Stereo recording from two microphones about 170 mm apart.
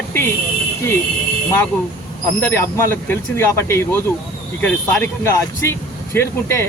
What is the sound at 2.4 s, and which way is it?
Speech, 10° left (ahead or behind).